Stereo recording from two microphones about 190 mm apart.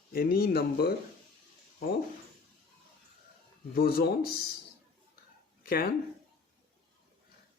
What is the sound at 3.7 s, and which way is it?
Speech, 50° left (ahead or behind).